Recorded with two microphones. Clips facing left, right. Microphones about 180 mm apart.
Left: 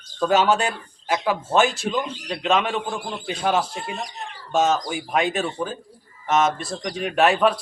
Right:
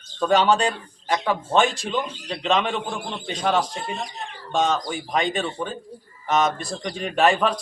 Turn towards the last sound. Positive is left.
turn(degrees=5)  # may be behind; listen again after turning